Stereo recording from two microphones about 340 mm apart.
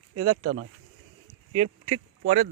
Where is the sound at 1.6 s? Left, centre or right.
Centre.